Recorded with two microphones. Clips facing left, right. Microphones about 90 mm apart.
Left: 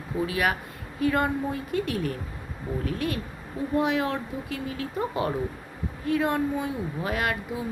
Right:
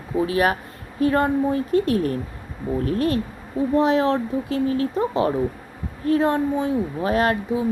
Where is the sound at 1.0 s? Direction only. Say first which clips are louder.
Right 6 dB; 35° right (ahead or behind).